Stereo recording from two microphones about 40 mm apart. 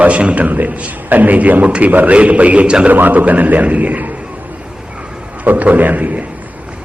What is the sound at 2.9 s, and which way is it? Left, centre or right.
A man's voice, right.